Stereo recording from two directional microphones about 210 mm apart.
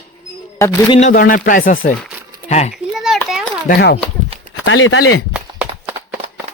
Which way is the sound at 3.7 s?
50° left (ahead or behind).